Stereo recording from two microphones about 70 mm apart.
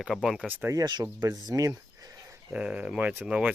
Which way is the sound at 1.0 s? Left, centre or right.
Right.